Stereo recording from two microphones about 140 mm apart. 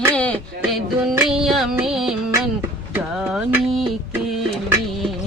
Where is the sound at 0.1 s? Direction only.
10° left (ahead or behind).